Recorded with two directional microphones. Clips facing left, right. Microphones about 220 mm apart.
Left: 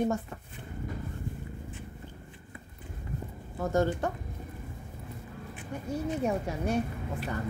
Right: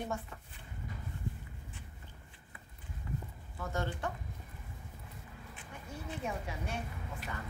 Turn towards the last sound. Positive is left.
turn(degrees=40)  # may be behind; listen again after turning